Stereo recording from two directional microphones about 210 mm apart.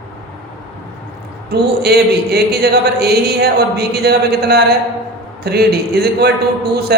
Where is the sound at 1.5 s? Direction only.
50° right (ahead or behind).